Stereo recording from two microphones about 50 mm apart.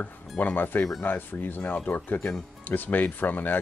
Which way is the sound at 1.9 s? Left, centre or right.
Left.